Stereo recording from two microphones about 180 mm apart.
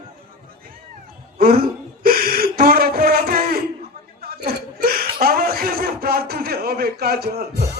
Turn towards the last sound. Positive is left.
turn(degrees=-60)  # may be behind; listen again after turning